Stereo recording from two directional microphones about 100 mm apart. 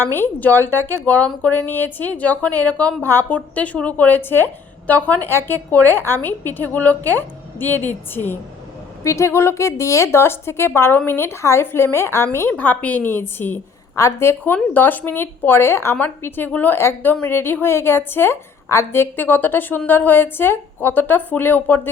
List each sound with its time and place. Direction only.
0.0 s a woman's voice: 20° left (ahead or behind)